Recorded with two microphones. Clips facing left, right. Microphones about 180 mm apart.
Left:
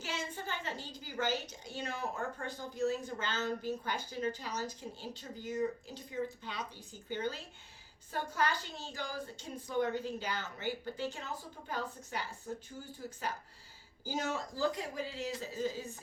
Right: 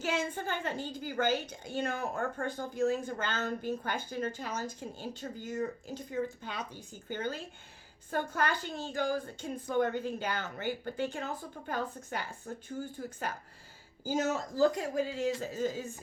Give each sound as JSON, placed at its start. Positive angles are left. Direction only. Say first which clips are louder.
{"t": 0.0, "sound": "a woman's voice", "louder": "right 7 dB", "side_deg": -50}